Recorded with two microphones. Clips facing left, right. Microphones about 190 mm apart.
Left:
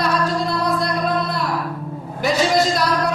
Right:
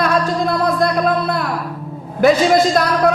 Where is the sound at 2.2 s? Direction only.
55° right (ahead or behind).